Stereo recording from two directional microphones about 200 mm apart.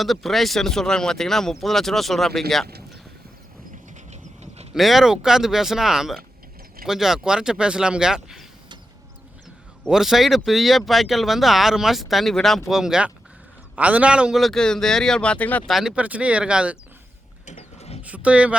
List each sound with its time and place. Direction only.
0.0 s speech: centre (ahead or behind)
4.1 s a sound: 30° right (ahead or behind)
4.7 s speech: centre (ahead or behind)
9.8 s speech: centre (ahead or behind)
17.4 s mechanisms: 35° left (ahead or behind)
18.0 s speech: 5° right (ahead or behind)